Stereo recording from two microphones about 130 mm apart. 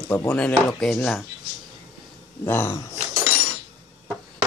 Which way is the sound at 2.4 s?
15° left (ahead or behind).